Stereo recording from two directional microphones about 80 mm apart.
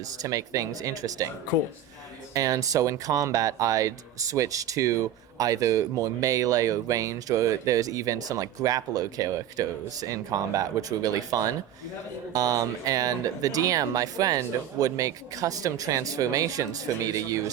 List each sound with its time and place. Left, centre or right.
0.0 s speech: right
2.3 s speech: right